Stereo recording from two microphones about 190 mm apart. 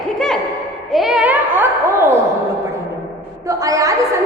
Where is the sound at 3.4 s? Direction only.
15° right (ahead or behind).